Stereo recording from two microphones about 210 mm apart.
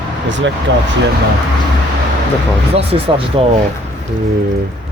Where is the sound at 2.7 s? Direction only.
25° right (ahead or behind).